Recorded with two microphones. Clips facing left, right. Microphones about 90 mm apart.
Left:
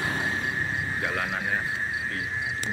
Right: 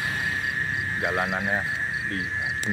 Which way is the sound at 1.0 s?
20° right (ahead or behind).